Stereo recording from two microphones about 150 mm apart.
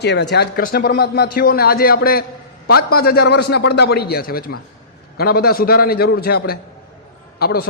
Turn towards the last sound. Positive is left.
turn(degrees=90)